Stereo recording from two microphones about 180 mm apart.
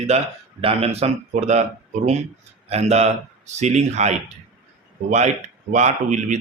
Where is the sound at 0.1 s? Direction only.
35° right (ahead or behind).